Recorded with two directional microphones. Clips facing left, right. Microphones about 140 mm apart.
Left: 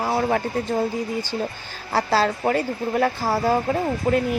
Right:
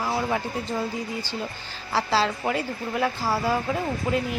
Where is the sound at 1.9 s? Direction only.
50° left (ahead or behind).